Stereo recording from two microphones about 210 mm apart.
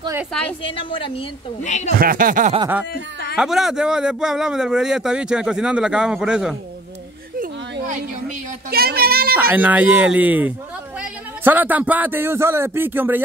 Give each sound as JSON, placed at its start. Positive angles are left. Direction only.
{"t": 0.0, "sound": "a woman's voice", "side_deg": -10}
{"t": 0.3, "sound": "a man's voice", "side_deg": 5}
{"t": 0.7, "sound": "a woman's voice", "side_deg": 25}
{"t": 2.0, "sound": "speech", "side_deg": -40}
{"t": 2.9, "sound": "speech", "side_deg": 50}
{"t": 3.3, "sound": "a man's voice", "side_deg": 0}
{"t": 7.3, "sound": "a sound", "side_deg": -40}
{"t": 8.6, "sound": "child singing", "side_deg": -45}
{"t": 9.4, "sound": "a man's voice", "side_deg": -10}